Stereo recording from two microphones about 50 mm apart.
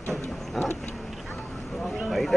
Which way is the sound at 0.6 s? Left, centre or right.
Centre.